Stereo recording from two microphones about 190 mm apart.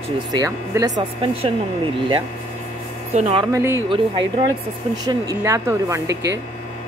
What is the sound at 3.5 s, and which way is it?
Speech, 10° right (ahead or behind).